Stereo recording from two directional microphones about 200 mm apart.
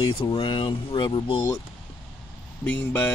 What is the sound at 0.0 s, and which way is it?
Speech, 25° left (ahead or behind).